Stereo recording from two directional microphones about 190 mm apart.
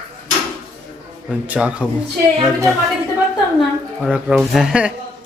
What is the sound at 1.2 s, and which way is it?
Speech, 5° right (ahead or behind).